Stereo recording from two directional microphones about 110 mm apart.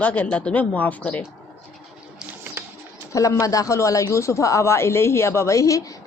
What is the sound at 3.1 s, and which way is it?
Speech, 30° left (ahead or behind).